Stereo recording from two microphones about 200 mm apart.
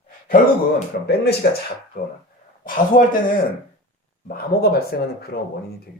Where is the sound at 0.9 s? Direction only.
50° left (ahead or behind).